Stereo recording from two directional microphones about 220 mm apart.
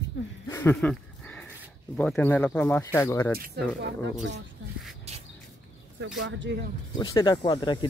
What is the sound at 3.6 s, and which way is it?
Speech, 45° right (ahead or behind).